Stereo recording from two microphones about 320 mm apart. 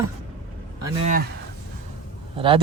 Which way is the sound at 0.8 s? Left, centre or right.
Centre.